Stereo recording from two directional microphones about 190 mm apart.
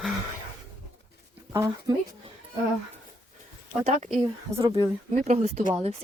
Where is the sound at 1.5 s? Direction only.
15° right (ahead or behind).